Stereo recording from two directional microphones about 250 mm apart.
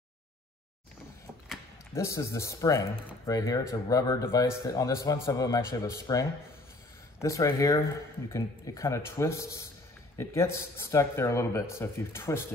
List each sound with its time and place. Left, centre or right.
2.0 s speech: centre